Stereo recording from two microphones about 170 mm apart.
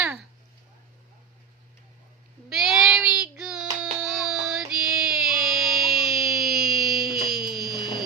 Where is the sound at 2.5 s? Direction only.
Centre (ahead or behind).